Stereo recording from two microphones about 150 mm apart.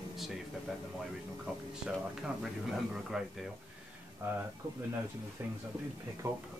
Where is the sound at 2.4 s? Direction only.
Centre (ahead or behind).